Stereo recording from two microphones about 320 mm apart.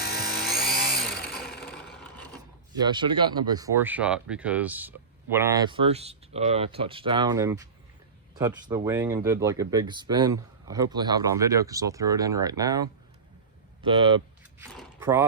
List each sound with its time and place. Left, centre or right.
0.0 s a sound: left
1.6 s vehicle: centre
2.7 s speech: centre
14.7 s speech: centre